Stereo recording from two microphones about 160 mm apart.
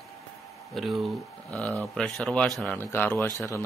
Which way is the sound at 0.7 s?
Centre (ahead or behind).